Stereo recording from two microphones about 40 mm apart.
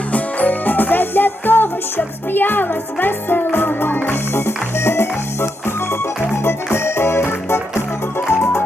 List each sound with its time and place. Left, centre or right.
0.1 s music: left